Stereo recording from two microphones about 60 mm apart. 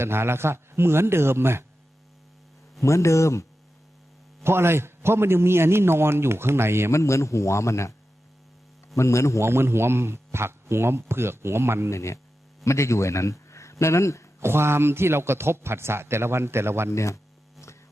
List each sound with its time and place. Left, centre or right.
0.0 s a man's voice: right
2.8 s a man's voice: left
4.4 s a man's voice: right
6.9 s a man's voice: left
9.0 s a man's voice: left
9.4 s a man's voice: right
11.9 s a man's voice: left
14.4 s a man's voice: right
16.9 s a man's voice: left